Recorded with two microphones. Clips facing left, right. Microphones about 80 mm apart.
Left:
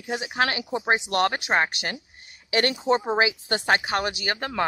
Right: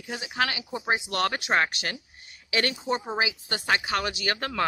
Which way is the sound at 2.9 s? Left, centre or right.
Left.